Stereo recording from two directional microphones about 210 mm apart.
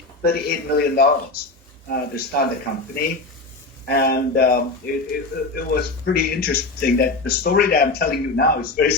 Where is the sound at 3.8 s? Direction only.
50° left (ahead or behind).